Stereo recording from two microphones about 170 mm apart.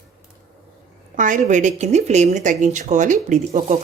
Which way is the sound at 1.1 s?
50° right (ahead or behind).